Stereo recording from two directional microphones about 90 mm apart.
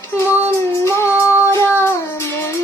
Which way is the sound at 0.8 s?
30° left (ahead or behind).